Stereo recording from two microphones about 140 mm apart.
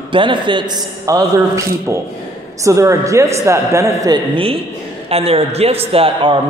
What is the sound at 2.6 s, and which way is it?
A man's voice, 20° right (ahead or behind).